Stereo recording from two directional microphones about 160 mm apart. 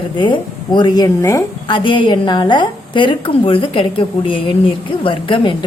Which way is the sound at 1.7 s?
30° left (ahead or behind).